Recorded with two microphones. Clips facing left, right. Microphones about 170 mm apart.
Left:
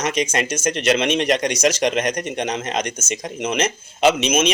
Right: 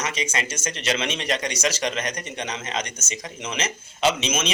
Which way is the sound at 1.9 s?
70° left (ahead or behind).